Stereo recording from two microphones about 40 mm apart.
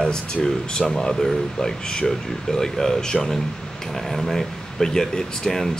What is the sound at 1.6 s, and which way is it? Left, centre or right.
Speech, centre.